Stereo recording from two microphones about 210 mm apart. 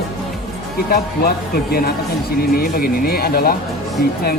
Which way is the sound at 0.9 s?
45° left (ahead or behind).